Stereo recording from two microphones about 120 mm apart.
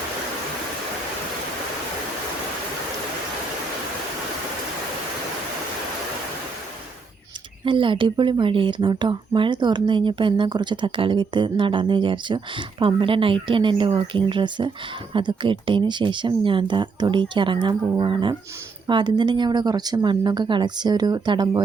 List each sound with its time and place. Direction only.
7.6 s speech: 45° right (ahead or behind)